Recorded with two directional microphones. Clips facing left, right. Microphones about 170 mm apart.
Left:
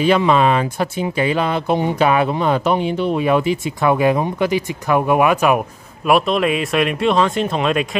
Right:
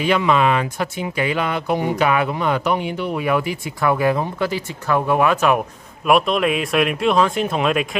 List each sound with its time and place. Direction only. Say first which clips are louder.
0.0 s speech: left 3 dB; 30° left (ahead or behind); by 5.6 s 10° left (ahead or behind)
6.0 s speech: left 1 dB; centre (ahead or behind)